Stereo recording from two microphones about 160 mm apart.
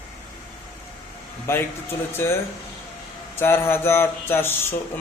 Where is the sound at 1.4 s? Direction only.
15° left (ahead or behind).